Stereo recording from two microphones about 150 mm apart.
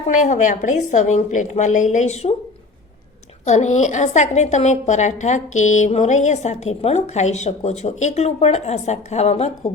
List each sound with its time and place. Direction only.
0.2 s a woman's voice: 55° left (ahead or behind)
3.4 s a woman's voice: 50° left (ahead or behind)